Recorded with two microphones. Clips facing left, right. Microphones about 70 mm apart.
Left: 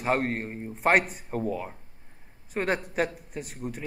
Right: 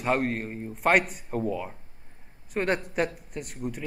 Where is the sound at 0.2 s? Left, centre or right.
Left.